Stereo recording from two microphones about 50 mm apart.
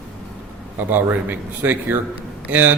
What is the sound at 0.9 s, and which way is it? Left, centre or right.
Speech, right.